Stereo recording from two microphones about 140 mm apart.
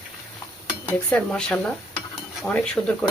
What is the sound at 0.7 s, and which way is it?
Dishes, 10° left (ahead or behind).